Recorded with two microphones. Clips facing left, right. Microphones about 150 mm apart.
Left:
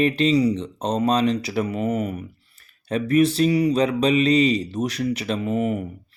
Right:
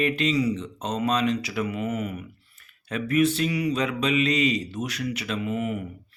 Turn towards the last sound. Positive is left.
turn(degrees=35)  # may be behind; listen again after turning